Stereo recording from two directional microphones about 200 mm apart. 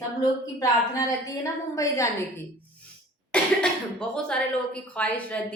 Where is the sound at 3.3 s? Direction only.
5° left (ahead or behind).